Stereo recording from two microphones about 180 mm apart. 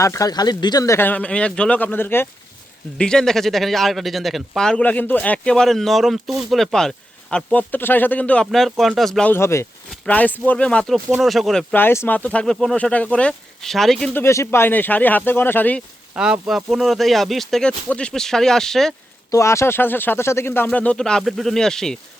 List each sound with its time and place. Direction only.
0.0 s speech: 20° left (ahead or behind)
16.1 s speech: 5° right (ahead or behind)
19.3 s speech: 15° left (ahead or behind)